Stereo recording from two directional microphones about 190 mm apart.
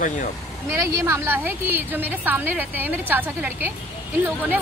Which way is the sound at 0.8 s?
15° right (ahead or behind).